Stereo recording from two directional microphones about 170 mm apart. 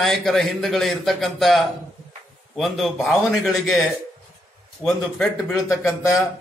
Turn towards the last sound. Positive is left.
turn(degrees=20)  # may be behind; listen again after turning